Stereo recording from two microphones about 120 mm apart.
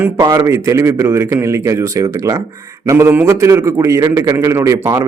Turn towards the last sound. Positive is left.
turn(degrees=-25)  # may be behind; listen again after turning